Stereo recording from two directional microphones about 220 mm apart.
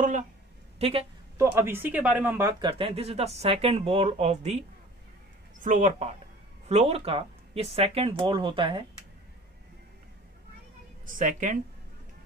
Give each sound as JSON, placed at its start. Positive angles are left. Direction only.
{"t": 0.7, "sound": "a woman's voice", "side_deg": -25}
{"t": 1.4, "sound": "speech", "side_deg": -10}
{"t": 2.7, "sound": "speech", "side_deg": -25}
{"t": 5.6, "sound": "a woman's voice", "side_deg": -35}
{"t": 11.1, "sound": "a woman's voice", "side_deg": -35}